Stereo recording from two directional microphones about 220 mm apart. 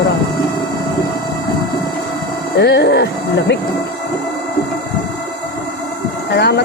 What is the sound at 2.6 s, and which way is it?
Speech, 50° left (ahead or behind).